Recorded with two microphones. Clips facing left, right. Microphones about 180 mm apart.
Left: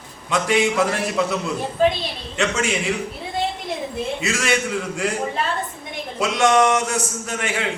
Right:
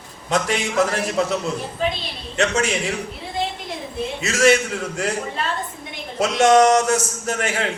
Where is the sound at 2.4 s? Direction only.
40° right (ahead or behind).